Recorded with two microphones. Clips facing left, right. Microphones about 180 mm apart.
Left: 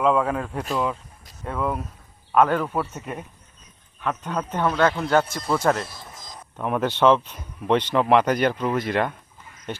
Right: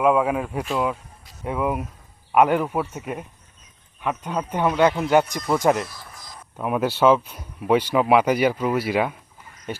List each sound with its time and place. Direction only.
0.0 s speech: 10° right (ahead or behind)
5.8 s a sound: 25° left (ahead or behind)
6.6 s speech: 5° right (ahead or behind)